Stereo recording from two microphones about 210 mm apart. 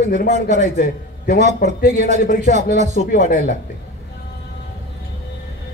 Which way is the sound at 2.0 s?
35° right (ahead or behind).